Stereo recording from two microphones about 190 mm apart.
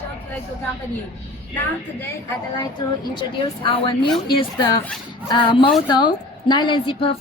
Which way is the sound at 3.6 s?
30° left (ahead or behind).